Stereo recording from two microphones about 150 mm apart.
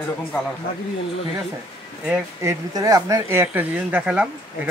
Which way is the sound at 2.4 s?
20° right (ahead or behind).